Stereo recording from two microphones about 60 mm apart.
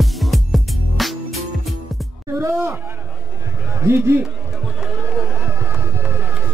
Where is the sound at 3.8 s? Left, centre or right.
Right.